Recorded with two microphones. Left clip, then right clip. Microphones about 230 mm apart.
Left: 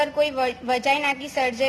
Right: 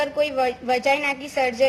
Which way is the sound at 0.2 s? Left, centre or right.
Centre.